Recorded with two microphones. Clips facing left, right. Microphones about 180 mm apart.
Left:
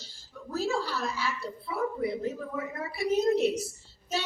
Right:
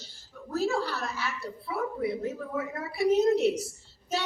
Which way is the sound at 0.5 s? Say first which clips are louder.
Right 2 dB; 60° right (ahead or behind).